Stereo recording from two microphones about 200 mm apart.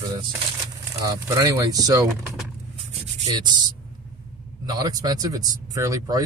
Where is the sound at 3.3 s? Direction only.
20° right (ahead or behind).